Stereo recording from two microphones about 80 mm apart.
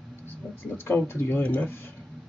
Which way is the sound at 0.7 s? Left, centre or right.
Left.